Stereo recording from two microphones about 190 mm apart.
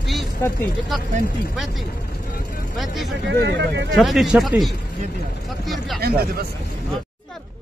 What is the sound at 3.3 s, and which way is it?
Speech, 65° right (ahead or behind).